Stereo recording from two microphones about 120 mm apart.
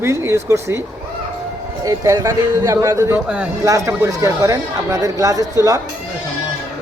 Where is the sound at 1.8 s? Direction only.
30° right (ahead or behind).